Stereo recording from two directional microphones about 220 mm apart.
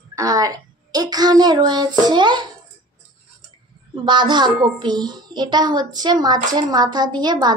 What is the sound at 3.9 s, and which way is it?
A child's voice, 20° right (ahead or behind).